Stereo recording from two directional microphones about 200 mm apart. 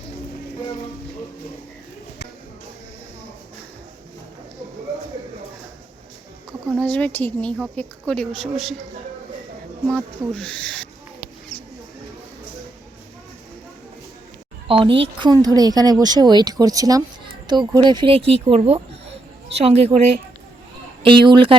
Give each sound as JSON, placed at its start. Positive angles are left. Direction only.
{"t": 6.7, "sound": "a woman's voice", "side_deg": 5}
{"t": 9.9, "sound": "a woman's voice", "side_deg": 5}
{"t": 14.7, "sound": "a woman's voice", "side_deg": -25}
{"t": 21.0, "sound": "a woman's voice", "side_deg": -25}